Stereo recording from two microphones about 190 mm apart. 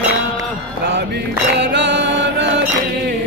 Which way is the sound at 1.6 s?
65° right (ahead or behind).